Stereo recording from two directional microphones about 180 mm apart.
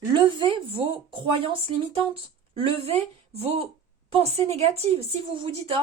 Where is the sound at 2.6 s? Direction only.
30° right (ahead or behind).